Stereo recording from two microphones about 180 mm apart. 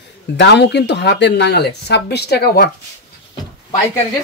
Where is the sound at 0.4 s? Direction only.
70° left (ahead or behind).